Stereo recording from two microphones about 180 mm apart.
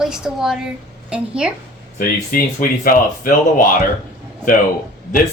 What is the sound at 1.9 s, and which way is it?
Speech, 50° left (ahead or behind).